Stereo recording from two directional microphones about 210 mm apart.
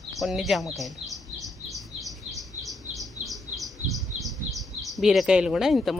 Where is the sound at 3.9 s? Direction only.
Centre (ahead or behind).